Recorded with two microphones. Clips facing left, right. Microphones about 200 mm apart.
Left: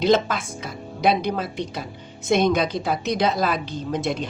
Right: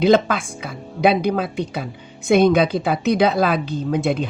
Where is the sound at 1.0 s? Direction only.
55° right (ahead or behind).